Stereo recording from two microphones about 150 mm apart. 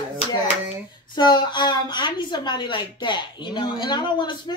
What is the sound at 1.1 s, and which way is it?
A woman's voice, 30° left (ahead or behind).